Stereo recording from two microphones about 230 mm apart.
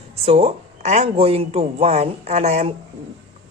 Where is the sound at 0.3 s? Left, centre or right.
Right.